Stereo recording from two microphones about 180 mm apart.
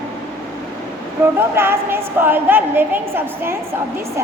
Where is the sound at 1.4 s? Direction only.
15° right (ahead or behind).